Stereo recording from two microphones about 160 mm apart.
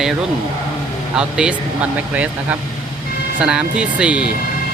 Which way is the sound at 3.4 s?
5° right (ahead or behind).